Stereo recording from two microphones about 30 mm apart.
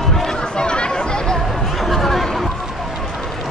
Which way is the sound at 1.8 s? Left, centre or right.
Centre.